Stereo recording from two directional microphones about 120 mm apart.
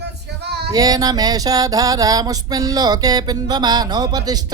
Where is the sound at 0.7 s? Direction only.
30° right (ahead or behind).